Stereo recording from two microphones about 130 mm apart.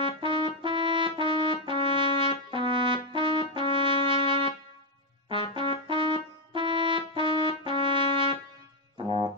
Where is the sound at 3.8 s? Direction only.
40° right (ahead or behind).